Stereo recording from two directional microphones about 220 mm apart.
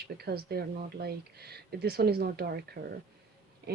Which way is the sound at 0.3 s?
45° right (ahead or behind).